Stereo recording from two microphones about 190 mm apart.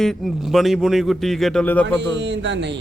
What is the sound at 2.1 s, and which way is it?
Speech, 70° right (ahead or behind).